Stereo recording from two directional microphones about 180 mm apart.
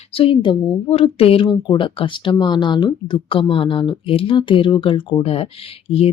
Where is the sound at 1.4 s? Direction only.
20° left (ahead or behind).